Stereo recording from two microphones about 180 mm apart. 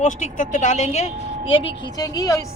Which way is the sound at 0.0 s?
45° left (ahead or behind).